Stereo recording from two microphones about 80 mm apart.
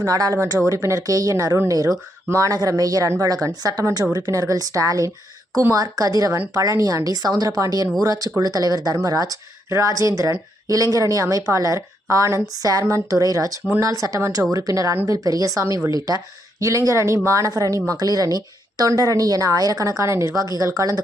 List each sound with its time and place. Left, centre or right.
0.0 s speech: right